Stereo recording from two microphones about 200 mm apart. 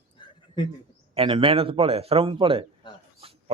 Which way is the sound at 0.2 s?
25° left (ahead or behind).